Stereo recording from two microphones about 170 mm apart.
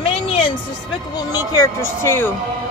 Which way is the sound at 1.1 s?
20° left (ahead or behind).